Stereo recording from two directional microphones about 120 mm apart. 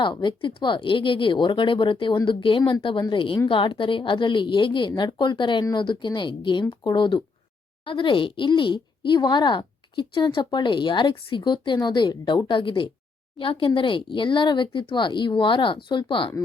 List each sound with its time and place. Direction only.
0.0 s speech: 40° left (ahead or behind)